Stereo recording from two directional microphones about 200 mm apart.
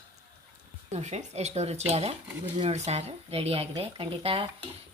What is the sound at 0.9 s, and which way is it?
Speech, 35° right (ahead or behind).